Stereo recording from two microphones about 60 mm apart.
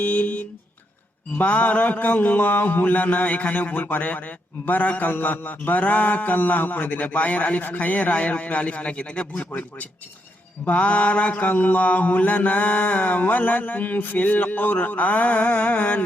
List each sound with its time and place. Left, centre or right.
0.0 s mantra: left